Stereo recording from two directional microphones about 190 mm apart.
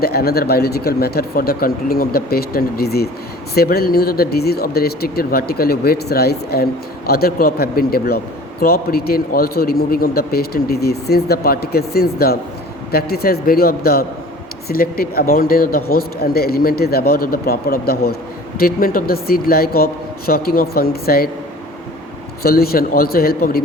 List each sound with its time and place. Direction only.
0.0 s speech: 55° left (ahead or behind)
22.4 s speech: 55° left (ahead or behind)